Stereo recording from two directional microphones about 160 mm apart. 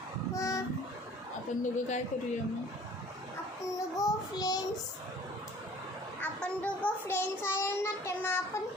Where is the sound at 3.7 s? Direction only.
20° left (ahead or behind).